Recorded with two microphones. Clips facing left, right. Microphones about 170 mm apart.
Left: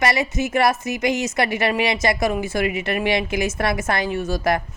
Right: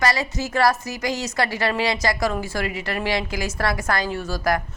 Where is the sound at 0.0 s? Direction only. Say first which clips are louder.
Left 2 dB; 20° left (ahead or behind).